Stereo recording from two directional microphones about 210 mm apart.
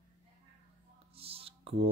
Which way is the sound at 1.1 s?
25° right (ahead or behind).